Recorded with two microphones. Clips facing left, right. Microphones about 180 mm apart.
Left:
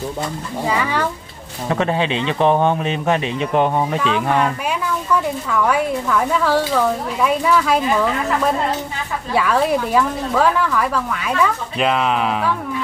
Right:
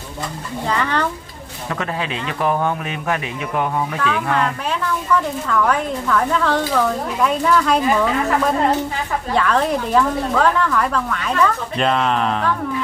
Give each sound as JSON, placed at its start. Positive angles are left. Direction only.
{"t": 0.7, "sound": "speech", "side_deg": 10}
{"t": 1.7, "sound": "speech", "side_deg": 25}
{"t": 4.3, "sound": "speech", "side_deg": 10}